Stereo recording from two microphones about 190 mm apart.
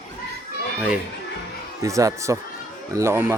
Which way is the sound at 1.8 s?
15° right (ahead or behind).